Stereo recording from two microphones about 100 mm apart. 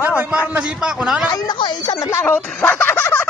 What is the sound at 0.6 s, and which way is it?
Speech, 10° right (ahead or behind).